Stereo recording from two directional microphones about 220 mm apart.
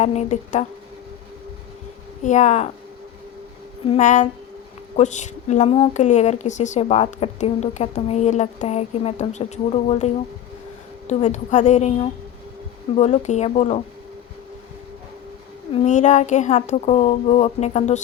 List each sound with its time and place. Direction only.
0.0 s a woman's voice: 30° left (ahead or behind)
2.2 s a woman's voice: 30° left (ahead or behind)
3.8 s a woman's voice: 35° left (ahead or behind)
15.7 s a woman's voice: 30° left (ahead or behind)